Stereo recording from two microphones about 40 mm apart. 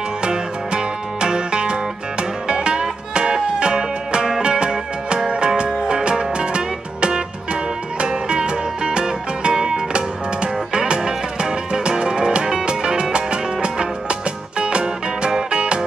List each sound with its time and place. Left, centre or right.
0.2 s music: centre